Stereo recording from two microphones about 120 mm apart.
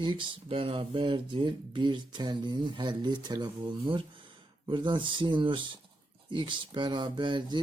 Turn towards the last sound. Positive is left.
turn(degrees=-40)  # may be behind; listen again after turning